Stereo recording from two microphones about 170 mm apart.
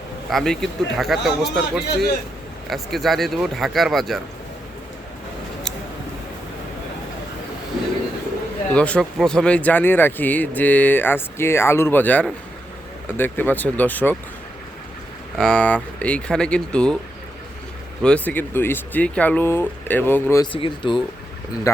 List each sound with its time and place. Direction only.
0.3 s speech: centre (ahead or behind)
8.7 s speech: 5° left (ahead or behind)
15.4 s speech: 5° left (ahead or behind)
18.0 s speech: 10° left (ahead or behind)
20.4 s speech: 30° left (ahead or behind)